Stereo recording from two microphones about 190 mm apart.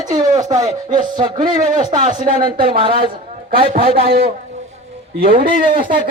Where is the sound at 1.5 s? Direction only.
45° right (ahead or behind).